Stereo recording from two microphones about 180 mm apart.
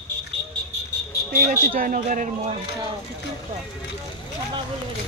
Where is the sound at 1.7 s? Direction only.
50° right (ahead or behind).